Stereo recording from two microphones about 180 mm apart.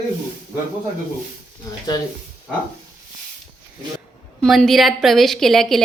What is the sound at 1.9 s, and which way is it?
Speech, 20° left (ahead or behind).